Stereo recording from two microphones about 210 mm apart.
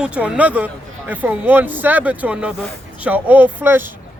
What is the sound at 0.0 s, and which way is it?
Speech, 5° right (ahead or behind).